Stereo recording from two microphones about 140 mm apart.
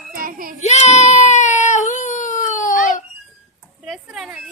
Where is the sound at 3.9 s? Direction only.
5° right (ahead or behind).